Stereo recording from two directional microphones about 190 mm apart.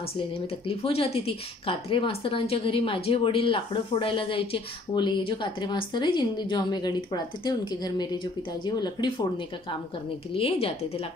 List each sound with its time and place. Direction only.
0.7 s a woman's voice: 30° left (ahead or behind)
10.3 s a woman's voice: 30° left (ahead or behind)